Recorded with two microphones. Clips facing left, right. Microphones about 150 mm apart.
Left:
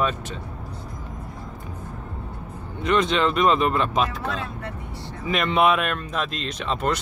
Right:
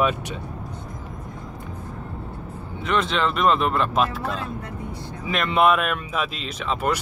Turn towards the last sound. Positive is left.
turn(degrees=-5)  # may be behind; listen again after turning